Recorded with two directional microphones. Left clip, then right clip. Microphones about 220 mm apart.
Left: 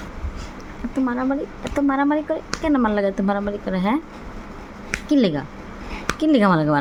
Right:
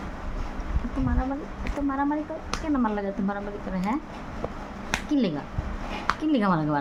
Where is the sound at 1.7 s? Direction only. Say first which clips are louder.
Left 7 dB; 30° left (ahead or behind).